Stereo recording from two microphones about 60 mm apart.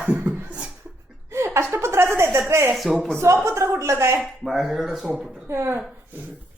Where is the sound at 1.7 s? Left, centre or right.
Right.